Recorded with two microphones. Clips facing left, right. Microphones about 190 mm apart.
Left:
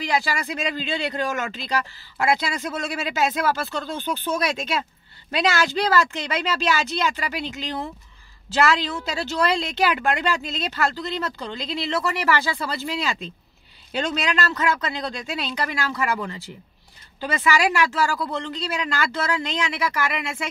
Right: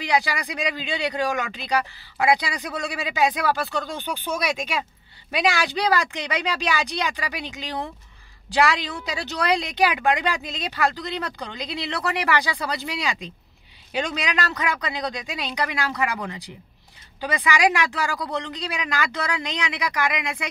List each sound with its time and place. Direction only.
0.0 s speech: 20° right (ahead or behind)